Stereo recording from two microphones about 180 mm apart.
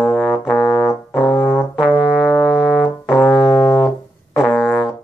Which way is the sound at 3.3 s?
25° left (ahead or behind).